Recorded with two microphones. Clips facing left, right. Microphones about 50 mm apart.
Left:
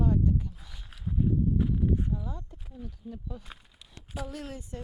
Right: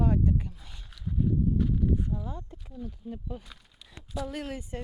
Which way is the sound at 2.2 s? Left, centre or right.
Right.